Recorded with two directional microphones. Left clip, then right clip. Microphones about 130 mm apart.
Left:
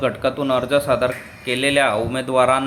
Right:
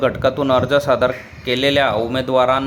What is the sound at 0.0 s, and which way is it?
A man's voice, 30° right (ahead or behind).